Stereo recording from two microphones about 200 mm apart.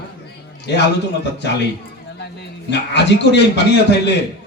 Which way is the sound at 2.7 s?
60° left (ahead or behind).